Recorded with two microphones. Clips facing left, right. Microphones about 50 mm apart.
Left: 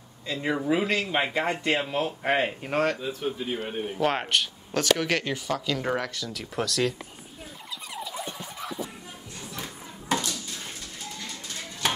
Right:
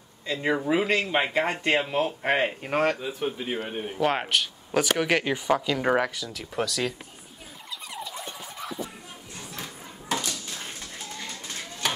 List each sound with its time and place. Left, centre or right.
0.3 s speech: centre
3.1 s a man's voice: right
3.6 s speech: centre
4.7 s speech: centre
6.1 s speech: centre
7.9 s a sound: centre